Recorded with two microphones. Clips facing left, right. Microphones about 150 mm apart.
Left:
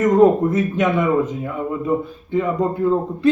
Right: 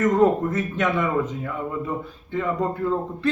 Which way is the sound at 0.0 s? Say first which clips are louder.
Left 5 dB; 15° left (ahead or behind).